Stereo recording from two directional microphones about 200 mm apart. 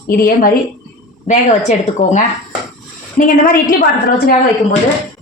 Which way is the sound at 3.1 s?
45° left (ahead or behind).